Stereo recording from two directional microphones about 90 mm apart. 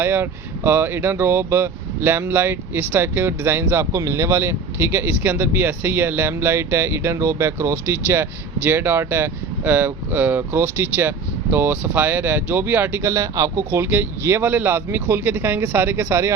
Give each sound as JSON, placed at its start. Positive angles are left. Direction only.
{"t": 0.0, "sound": "speech", "side_deg": -25}
{"t": 3.9, "sound": "speech", "side_deg": -35}
{"t": 13.1, "sound": "speech", "side_deg": -40}
{"t": 13.6, "sound": "speech", "side_deg": -25}